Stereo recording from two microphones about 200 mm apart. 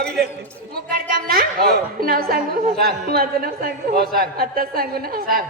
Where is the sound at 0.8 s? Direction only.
50° right (ahead or behind).